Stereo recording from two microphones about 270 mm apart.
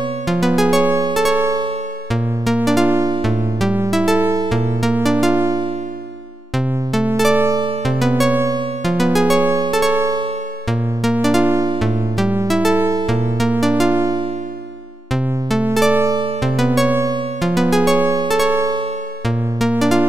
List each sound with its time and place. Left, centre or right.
0.3 s music: centre
6.9 s music: centre
7.4 s music: centre
7.8 s music: centre
11.5 s music: centre
11.8 s music: centre
15.5 s music: centre
16.4 s music: centre
17.4 s music: centre
18.0 s music: centre
18.3 s music: centre
19.6 s music: centre